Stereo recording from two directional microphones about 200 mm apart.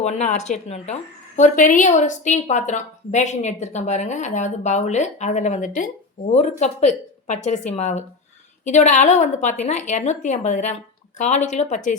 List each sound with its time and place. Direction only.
0.0 s a woman's voice: 35° left (ahead or behind)